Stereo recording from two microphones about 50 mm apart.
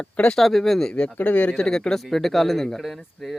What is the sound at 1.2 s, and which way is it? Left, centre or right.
Speech, left.